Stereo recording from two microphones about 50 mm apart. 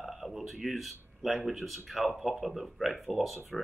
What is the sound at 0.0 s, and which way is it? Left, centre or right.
Speech, centre.